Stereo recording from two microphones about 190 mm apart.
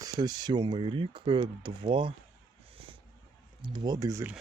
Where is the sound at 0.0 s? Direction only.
20° right (ahead or behind).